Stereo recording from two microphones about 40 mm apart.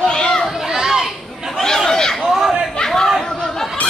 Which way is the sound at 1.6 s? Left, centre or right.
Centre.